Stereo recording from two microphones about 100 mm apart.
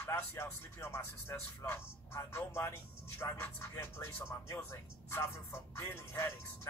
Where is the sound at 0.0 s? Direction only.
25° left (ahead or behind).